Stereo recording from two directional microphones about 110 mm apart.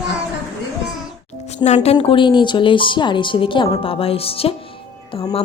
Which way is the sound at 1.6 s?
80° left.